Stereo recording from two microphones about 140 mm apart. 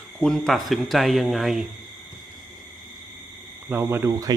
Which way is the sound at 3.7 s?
15° right (ahead or behind).